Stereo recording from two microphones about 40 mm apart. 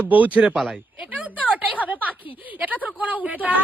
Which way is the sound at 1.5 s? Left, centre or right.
Right.